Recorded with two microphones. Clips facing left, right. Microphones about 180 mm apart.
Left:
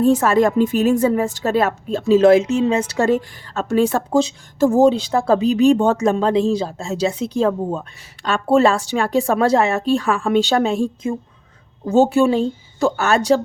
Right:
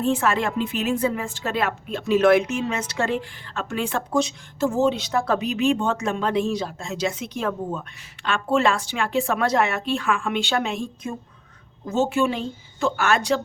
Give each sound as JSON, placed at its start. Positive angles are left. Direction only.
{"t": 0.0, "sound": "speech", "side_deg": 40}